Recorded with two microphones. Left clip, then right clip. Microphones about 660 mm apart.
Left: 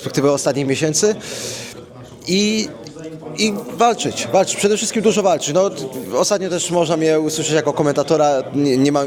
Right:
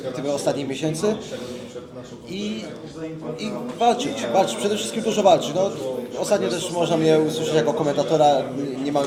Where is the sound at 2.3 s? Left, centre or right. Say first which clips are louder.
Left 13 dB; left.